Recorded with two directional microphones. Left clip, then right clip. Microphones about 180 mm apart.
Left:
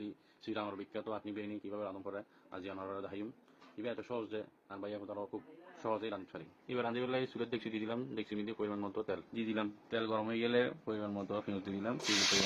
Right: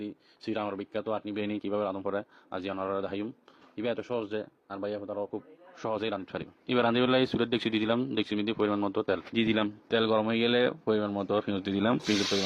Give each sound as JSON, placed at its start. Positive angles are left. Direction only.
{"t": 0.0, "sound": "a man's voice", "side_deg": -40}